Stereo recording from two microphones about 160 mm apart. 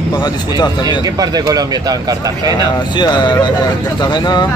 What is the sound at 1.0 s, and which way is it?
Speech, 25° right (ahead or behind).